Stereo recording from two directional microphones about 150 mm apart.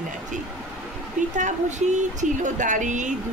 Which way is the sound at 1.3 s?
55° right (ahead or behind).